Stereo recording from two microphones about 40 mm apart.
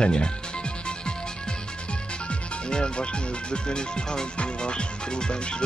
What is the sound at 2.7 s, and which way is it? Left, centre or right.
Music, left.